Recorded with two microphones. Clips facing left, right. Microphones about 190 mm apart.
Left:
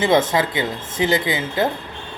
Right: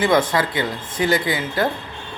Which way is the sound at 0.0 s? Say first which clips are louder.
Left 1 dB; 20° left (ahead or behind).